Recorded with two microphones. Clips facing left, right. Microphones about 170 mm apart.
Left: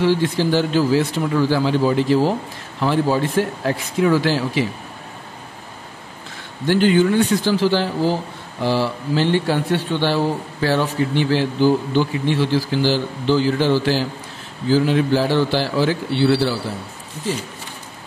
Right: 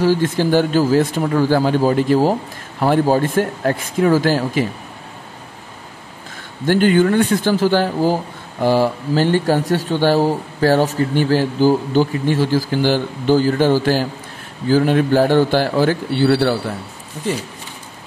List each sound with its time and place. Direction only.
0.0 s speech: 45° right (ahead or behind)
6.3 s speech: 50° right (ahead or behind)